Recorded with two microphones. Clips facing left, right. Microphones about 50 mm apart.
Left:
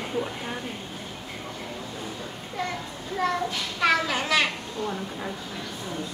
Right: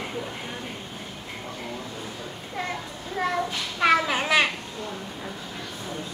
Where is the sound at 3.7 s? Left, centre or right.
Centre.